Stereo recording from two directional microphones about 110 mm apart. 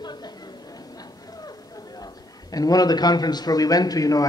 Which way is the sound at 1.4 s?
35° left (ahead or behind).